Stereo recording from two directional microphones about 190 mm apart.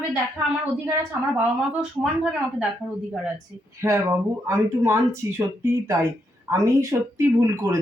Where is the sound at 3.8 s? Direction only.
15° right (ahead or behind).